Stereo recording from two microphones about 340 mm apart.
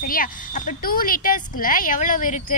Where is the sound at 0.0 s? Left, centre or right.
Left.